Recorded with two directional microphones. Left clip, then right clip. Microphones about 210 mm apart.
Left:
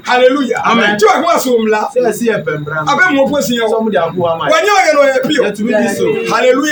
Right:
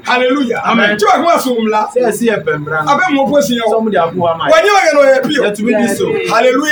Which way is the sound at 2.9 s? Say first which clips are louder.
Left 2 dB; 5° left (ahead or behind).